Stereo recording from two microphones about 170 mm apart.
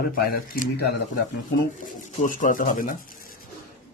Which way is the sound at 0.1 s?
60° left (ahead or behind).